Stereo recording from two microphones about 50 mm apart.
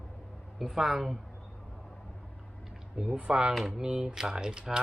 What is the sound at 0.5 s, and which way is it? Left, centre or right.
Speech, centre.